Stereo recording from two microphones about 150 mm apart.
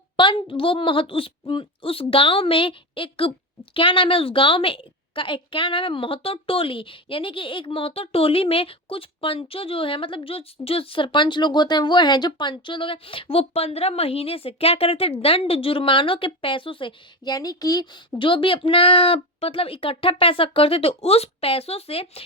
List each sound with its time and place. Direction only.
0.2 s a woman's voice: 35° left (ahead or behind)